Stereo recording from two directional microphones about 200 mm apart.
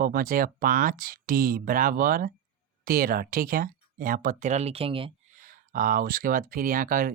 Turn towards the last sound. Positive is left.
turn(degrees=-45)  # may be behind; listen again after turning